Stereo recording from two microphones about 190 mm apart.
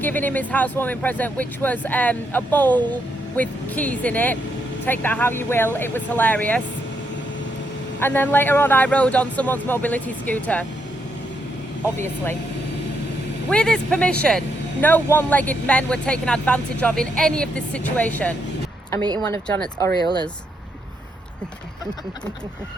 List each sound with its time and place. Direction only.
0.0 s speech: 10° left (ahead or behind)
7.9 s speech: 10° left (ahead or behind)
13.5 s speech: 5° left (ahead or behind)